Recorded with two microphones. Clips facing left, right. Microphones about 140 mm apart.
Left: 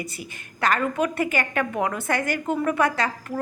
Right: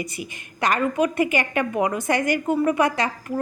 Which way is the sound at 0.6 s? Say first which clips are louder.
Right 2 dB; 15° right (ahead or behind).